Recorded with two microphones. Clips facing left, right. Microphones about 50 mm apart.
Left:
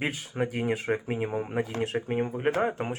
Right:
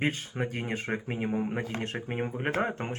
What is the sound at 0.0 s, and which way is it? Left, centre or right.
Speech, centre.